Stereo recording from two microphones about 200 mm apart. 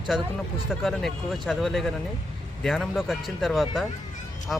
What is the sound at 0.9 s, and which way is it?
Speech, centre (ahead or behind).